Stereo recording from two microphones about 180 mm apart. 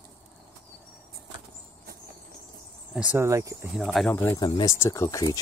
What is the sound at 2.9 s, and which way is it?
Speech, 5° right (ahead or behind).